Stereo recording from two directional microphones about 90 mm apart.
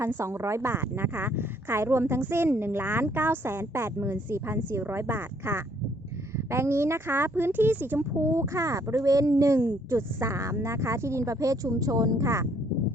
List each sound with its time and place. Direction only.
0.2 s a woman's voice: 30° right (ahead or behind)
8.2 s speech: 35° right (ahead or behind)